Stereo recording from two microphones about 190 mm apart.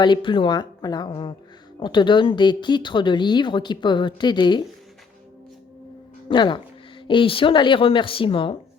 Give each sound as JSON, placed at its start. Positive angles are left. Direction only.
{"t": 0.0, "sound": "speech", "side_deg": 25}
{"t": 6.2, "sound": "speech", "side_deg": 25}